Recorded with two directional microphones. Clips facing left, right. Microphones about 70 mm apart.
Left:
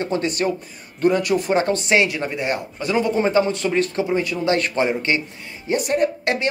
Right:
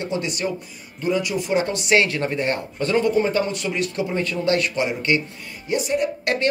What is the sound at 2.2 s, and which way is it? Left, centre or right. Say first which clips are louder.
Speech: right 1 dB; centre.